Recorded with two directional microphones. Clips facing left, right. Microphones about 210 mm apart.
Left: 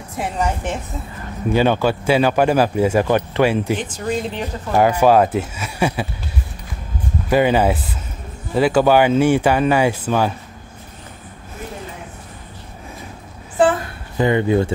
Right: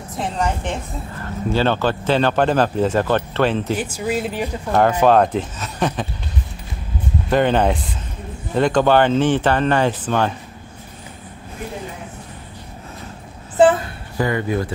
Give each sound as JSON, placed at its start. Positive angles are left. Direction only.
{"t": 0.2, "sound": "speech", "side_deg": 10}
{"t": 3.7, "sound": "speech", "side_deg": -10}
{"t": 4.7, "sound": "speech", "side_deg": 10}
{"t": 7.2, "sound": "speech", "side_deg": 10}
{"t": 14.1, "sound": "speech", "side_deg": 20}